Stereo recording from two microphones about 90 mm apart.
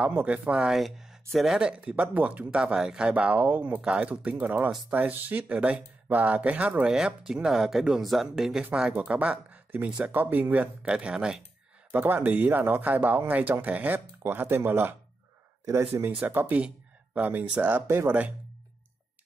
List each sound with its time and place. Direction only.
0.0 s speech: 15° right (ahead or behind)
10.1 s speech: 20° right (ahead or behind)
11.9 s speech: 20° right (ahead or behind)